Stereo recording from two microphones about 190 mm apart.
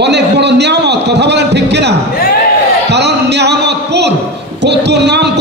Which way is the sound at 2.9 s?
65° right (ahead or behind).